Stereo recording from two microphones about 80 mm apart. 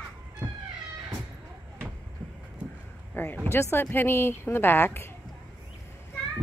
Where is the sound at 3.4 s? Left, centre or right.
Left.